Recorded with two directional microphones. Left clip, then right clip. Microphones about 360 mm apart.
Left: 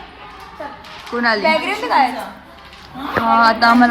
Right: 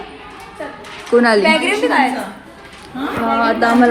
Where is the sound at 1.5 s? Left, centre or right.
Left.